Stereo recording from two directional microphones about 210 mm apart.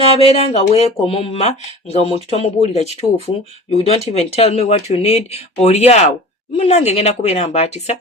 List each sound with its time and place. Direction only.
0.2 s speech: 30° left (ahead or behind)